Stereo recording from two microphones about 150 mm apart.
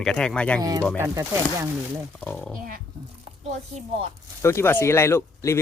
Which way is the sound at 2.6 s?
70° right (ahead or behind).